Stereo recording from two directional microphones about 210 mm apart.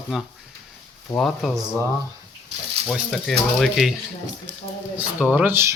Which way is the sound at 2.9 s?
Centre (ahead or behind).